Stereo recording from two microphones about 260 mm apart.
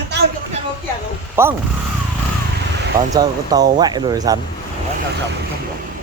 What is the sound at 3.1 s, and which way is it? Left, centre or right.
Speech, centre.